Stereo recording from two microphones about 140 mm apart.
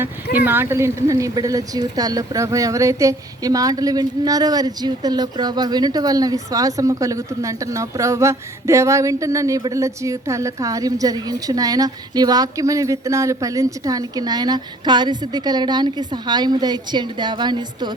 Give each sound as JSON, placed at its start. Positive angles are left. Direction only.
{"t": 0.0, "sound": "speech", "side_deg": -15}